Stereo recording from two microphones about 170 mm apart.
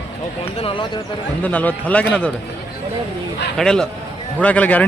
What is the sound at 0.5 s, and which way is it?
Speech, 30° left (ahead or behind).